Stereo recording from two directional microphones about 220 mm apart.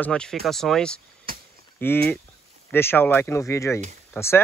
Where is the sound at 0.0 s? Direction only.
5° left (ahead or behind).